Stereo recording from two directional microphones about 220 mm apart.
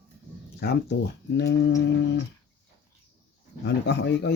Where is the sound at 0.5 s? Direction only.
50° left (ahead or behind).